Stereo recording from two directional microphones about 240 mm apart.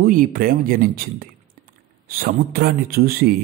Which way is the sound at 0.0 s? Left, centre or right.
Right.